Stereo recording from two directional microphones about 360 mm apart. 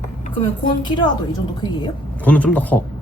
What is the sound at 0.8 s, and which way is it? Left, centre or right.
A woman's voice, centre.